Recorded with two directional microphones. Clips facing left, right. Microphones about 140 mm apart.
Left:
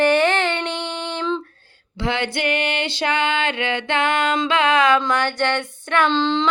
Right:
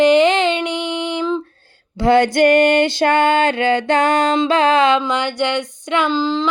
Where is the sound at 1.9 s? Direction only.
40° right (ahead or behind).